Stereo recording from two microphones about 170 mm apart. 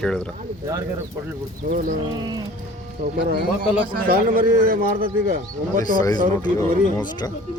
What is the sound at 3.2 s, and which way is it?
Speech, 70° right (ahead or behind).